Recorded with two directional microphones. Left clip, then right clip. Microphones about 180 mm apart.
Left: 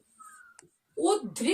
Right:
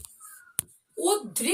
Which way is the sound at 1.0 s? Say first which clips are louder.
Right 1 dB; 5° left (ahead or behind).